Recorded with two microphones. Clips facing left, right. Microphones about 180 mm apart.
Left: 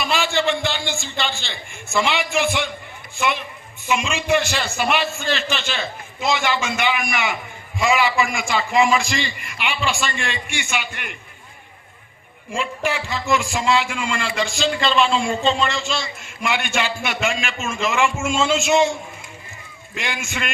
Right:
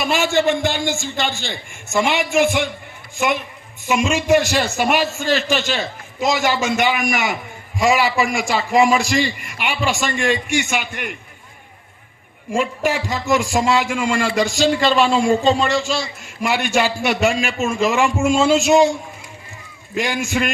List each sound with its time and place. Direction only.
0.0 s a man's voice: 45° right (ahead or behind)
12.5 s a man's voice: 40° right (ahead or behind)
20.0 s a man's voice: 40° right (ahead or behind)